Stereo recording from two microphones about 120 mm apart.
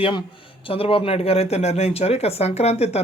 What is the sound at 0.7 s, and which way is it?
Speech, 50° left (ahead or behind).